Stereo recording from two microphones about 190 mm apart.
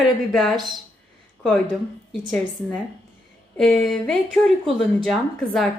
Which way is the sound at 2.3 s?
5° left (ahead or behind).